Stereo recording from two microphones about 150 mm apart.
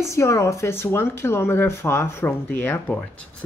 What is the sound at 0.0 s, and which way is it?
Speech, 20° left (ahead or behind).